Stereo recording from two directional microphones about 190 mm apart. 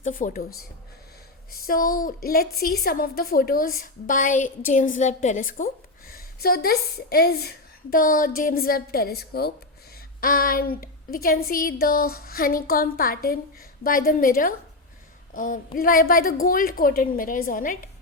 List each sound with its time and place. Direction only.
0.0 s a woman's voice: 45° left (ahead or behind)
1.6 s a woman's voice: 50° left (ahead or behind)